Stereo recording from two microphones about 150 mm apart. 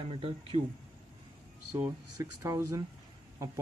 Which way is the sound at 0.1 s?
35° right (ahead or behind).